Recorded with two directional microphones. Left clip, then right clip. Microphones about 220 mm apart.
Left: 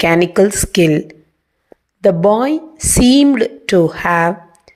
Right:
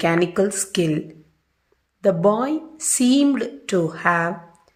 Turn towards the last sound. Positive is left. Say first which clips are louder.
# left 13 dB
turn(degrees=25)  # may be behind; listen again after turning